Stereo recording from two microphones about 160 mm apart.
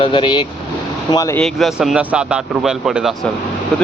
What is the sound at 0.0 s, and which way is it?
Speech, 30° left (ahead or behind).